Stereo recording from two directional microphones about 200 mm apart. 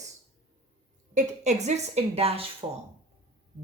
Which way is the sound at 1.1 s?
35° right (ahead or behind).